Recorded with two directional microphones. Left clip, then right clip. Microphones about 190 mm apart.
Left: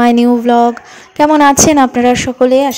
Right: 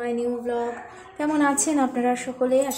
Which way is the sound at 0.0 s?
50° left (ahead or behind).